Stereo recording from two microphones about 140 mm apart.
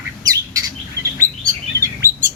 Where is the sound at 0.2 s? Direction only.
25° right (ahead or behind).